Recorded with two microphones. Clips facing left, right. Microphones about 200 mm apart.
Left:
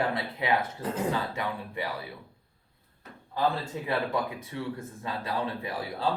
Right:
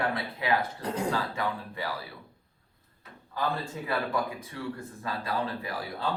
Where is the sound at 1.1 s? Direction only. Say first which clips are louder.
Right 1 dB; 20° left (ahead or behind).